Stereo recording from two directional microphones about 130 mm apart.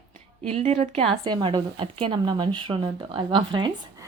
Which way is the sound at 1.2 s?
35° right (ahead or behind).